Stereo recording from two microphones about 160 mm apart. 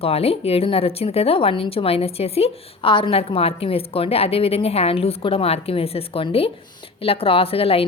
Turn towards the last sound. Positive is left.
turn(degrees=35)  # may be behind; listen again after turning